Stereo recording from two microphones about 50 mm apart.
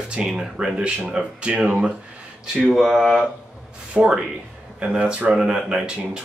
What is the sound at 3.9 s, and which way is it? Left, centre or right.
Speech, right.